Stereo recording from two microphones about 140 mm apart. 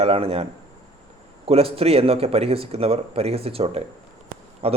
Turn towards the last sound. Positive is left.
turn(degrees=-45)  # may be behind; listen again after turning